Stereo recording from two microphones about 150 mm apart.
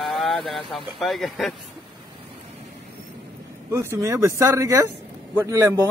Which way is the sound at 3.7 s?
15° right (ahead or behind).